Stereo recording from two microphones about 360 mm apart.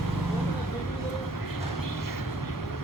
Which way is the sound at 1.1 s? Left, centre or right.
Left.